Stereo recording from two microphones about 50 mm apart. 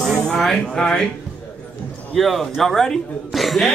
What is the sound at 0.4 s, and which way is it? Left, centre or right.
Speech, centre.